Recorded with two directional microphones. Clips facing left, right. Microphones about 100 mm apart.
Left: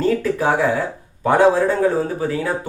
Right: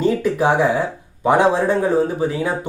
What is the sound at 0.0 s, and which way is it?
Speech, 20° right (ahead or behind).